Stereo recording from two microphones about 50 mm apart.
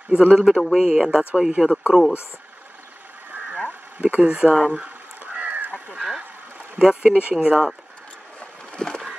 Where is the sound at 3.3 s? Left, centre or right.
Right.